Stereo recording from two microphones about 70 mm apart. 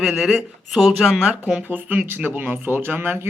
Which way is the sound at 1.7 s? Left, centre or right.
Right.